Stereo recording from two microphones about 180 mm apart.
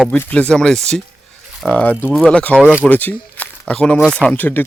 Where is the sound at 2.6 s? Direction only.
5° right (ahead or behind).